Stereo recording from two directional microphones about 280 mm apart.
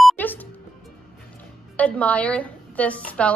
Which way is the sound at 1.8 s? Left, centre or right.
Centre.